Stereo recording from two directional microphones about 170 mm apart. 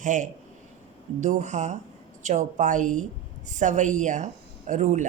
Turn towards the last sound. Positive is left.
turn(degrees=-45)  # may be behind; listen again after turning